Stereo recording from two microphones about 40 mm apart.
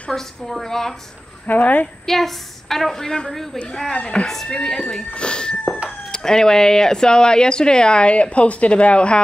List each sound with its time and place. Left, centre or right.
0.1 s a woman's voice: centre
1.5 s a woman's voice: left
2.0 s a woman's voice: centre
4.3 s a woman's voice: centre
5.1 s speech: left